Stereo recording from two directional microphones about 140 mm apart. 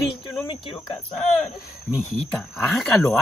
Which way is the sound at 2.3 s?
Centre (ahead or behind).